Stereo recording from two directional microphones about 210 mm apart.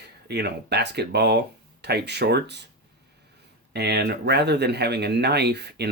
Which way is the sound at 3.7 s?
50° right (ahead or behind).